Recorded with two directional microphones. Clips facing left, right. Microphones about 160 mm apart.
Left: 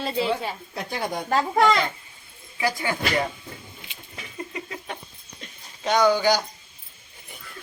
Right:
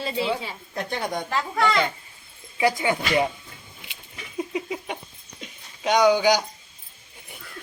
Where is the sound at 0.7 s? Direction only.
5° left (ahead or behind).